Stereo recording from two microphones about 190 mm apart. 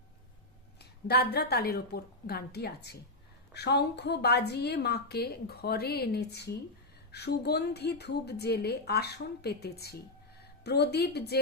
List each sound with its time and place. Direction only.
0.8 s a woman's voice: 55° left (ahead or behind)